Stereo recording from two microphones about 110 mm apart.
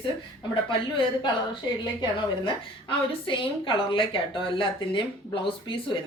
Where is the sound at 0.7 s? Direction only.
50° left (ahead or behind).